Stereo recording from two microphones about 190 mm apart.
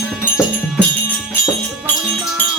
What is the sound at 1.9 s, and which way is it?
Music, 10° left (ahead or behind).